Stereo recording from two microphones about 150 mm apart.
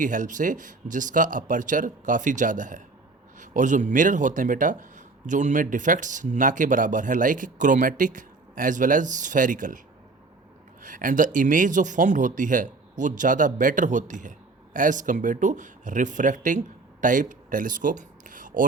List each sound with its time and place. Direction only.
0.0 s a man's voice: 60° right (ahead or behind)
10.8 s a man's voice: 60° right (ahead or behind)